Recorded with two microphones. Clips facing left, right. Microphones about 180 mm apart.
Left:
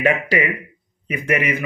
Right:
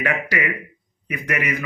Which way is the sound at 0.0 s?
25° left (ahead or behind).